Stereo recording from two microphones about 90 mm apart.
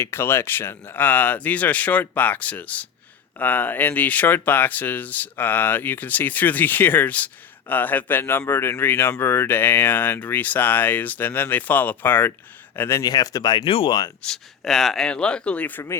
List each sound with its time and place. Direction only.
0.0 s a man's voice: 25° left (ahead or behind)
13.0 s speech: 45° left (ahead or behind)
13.7 s speech: 90° left
14.2 s speech: 5° left (ahead or behind)